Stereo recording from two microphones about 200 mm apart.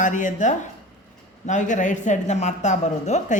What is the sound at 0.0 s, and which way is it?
A woman's voice, 40° left (ahead or behind).